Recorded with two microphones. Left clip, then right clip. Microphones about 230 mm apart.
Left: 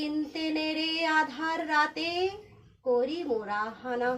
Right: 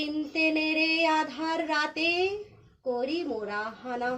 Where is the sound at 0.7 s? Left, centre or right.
Centre.